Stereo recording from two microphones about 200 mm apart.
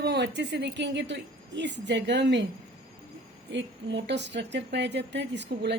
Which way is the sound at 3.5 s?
60° right (ahead or behind).